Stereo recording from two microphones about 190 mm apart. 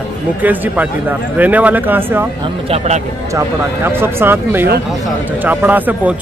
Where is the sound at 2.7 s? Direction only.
35° right (ahead or behind).